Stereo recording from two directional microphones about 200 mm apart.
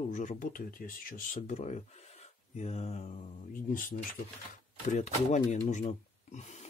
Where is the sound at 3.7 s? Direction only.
45° left (ahead or behind).